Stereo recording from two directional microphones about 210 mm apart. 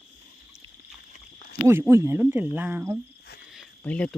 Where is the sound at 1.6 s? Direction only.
10° right (ahead or behind).